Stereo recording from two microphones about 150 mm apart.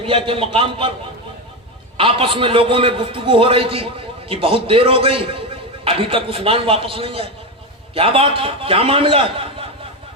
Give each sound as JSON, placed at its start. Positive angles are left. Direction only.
{"t": 0.3, "sound": "a man's voice", "side_deg": -35}
{"t": 2.0, "sound": "a man's voice", "side_deg": -35}